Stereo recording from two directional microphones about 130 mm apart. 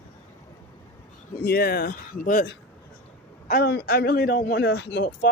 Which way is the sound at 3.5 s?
90° left.